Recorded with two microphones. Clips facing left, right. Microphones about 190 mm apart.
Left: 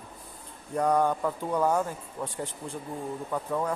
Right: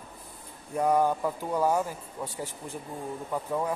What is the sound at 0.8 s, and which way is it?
Speech, 5° right (ahead or behind).